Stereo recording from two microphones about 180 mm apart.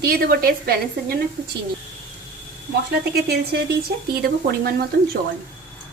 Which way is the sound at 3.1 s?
60° right (ahead or behind).